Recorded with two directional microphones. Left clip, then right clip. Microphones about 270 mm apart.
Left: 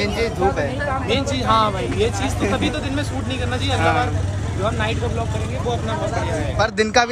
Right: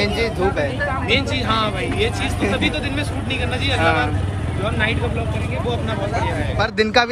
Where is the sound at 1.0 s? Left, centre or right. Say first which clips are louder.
Even; centre.